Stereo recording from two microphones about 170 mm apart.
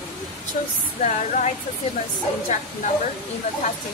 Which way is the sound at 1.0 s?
45° left (ahead or behind).